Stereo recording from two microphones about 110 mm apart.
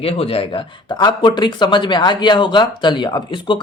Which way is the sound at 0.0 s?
60° left (ahead or behind).